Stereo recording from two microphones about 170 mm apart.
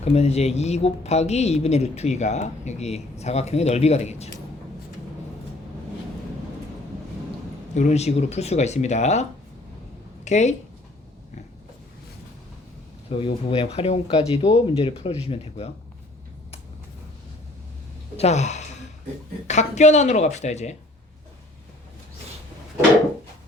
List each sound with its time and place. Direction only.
0.0 s a woman's voice: 40° left (ahead or behind)
7.7 s a woman's voice: 45° left (ahead or behind)
10.2 s speech: 45° left (ahead or behind)
13.1 s a woman's voice: 35° left (ahead or behind)
18.2 s a woman's voice: 40° left (ahead or behind)